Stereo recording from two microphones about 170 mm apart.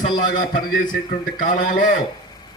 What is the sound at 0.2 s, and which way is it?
A man's voice, 50° left (ahead or behind).